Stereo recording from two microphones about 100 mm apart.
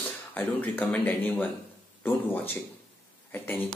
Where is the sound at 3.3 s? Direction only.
20° left (ahead or behind).